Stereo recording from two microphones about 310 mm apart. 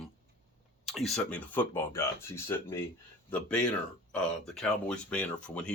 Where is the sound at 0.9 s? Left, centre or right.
Centre.